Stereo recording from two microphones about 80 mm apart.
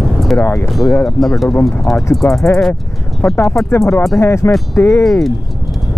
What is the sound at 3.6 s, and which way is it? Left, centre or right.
Speech, left.